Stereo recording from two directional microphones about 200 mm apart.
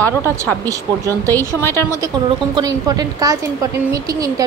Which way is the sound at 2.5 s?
20° right (ahead or behind).